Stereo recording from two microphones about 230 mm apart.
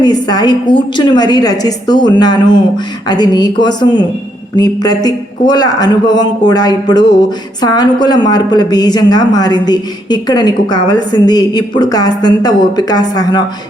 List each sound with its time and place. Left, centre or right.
0.0 s a man's voice: centre